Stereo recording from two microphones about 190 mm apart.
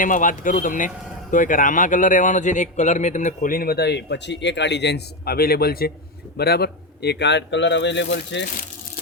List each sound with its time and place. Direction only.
0.0 s a man's voice: 45° left (ahead or behind); by 8.4 s 70° left (ahead or behind)